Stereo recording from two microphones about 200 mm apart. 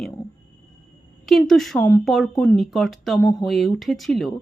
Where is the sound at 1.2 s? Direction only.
Centre (ahead or behind).